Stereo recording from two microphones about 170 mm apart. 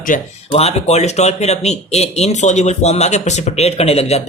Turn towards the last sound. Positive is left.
turn(degrees=40)  # may be behind; listen again after turning